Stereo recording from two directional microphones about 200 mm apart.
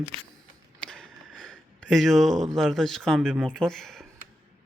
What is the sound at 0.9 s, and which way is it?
Speech, centre (ahead or behind).